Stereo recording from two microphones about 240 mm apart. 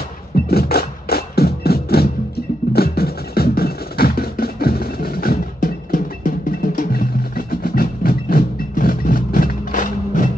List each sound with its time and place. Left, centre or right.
0.5 s music: left